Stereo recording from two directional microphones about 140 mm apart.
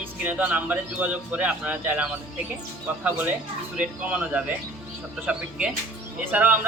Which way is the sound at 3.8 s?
10° right (ahead or behind).